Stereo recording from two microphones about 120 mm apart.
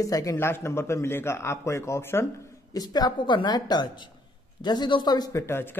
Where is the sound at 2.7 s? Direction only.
35° left (ahead or behind).